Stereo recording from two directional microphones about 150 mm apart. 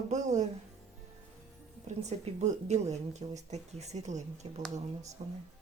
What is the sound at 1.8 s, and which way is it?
A woman's voice, 50° right (ahead or behind).